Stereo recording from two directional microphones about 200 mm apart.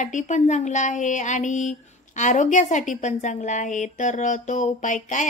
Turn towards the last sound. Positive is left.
turn(degrees=40)  # may be behind; listen again after turning